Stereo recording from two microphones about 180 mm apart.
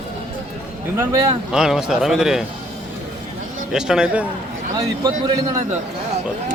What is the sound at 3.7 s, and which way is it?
Speech, 5° right (ahead or behind).